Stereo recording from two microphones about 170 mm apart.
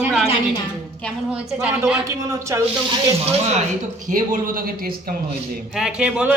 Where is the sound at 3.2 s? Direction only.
45° right (ahead or behind).